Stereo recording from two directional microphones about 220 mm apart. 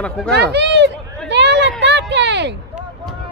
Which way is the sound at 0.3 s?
50° right (ahead or behind).